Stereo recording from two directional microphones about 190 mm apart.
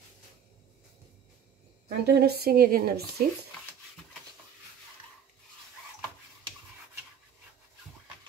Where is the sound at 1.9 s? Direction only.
60° right (ahead or behind).